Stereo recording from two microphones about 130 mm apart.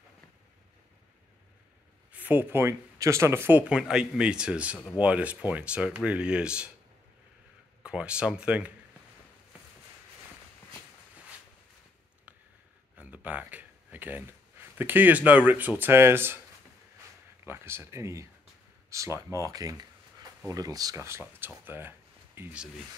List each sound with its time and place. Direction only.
2.1 s speech: 15° right (ahead or behind)
7.8 s speech: 10° right (ahead or behind)
12.9 s speech: 10° right (ahead or behind)
17.5 s speech: 20° right (ahead or behind)